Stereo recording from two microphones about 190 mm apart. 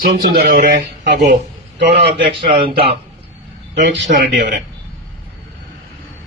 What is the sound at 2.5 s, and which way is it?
Speech, 30° right (ahead or behind).